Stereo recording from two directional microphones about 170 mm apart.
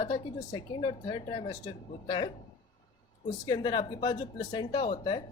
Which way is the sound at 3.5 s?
25° left (ahead or behind).